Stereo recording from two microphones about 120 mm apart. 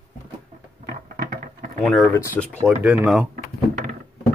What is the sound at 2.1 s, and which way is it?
Speech, 15° left (ahead or behind).